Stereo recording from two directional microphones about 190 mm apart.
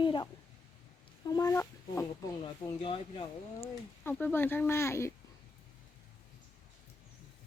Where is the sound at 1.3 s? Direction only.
15° left (ahead or behind).